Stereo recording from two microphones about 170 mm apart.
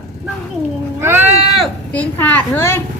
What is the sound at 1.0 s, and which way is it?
Speech, 15° right (ahead or behind).